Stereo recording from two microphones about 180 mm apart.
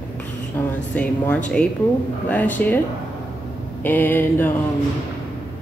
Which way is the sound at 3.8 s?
10° left (ahead or behind).